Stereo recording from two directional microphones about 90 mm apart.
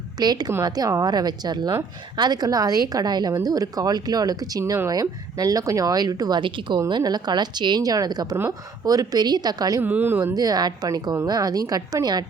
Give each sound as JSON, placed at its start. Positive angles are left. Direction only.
{"t": 0.2, "sound": "speech", "side_deg": -50}
{"t": 6.4, "sound": "speech", "side_deg": -65}
{"t": 6.7, "sound": "speech", "side_deg": -45}
{"t": 9.8, "sound": "speech", "side_deg": -20}
{"t": 10.3, "sound": "speech", "side_deg": -45}